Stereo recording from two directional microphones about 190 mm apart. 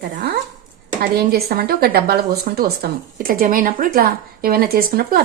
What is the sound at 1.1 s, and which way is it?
Speech, 55° right (ahead or behind).